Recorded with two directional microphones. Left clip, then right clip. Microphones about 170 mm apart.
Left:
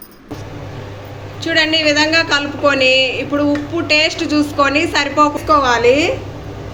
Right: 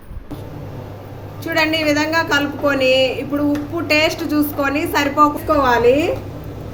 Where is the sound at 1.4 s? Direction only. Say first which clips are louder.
Left 3 dB; 50° right (ahead or behind).